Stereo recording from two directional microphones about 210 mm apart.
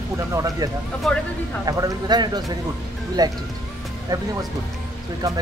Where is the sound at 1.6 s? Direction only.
15° right (ahead or behind).